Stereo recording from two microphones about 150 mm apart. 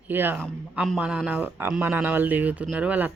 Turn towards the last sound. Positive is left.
turn(degrees=-10)  # may be behind; listen again after turning